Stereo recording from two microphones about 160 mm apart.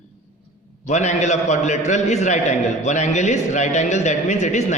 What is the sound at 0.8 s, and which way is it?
A man's voice, 45° left (ahead or behind).